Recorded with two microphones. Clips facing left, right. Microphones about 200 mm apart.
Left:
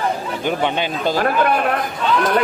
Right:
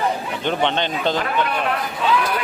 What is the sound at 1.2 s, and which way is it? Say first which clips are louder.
Speech: left 5 dB; 50° left (ahead or behind).